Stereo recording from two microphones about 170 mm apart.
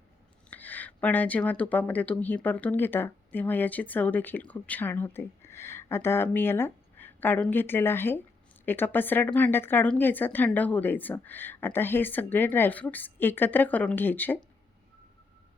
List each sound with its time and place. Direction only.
0.5 s speech: 10° left (ahead or behind)